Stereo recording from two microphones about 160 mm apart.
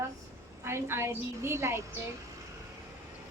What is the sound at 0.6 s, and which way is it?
A woman's voice, 15° right (ahead or behind).